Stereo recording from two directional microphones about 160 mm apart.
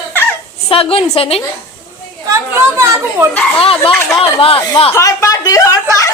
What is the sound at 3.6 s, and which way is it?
Speech, 35° left (ahead or behind).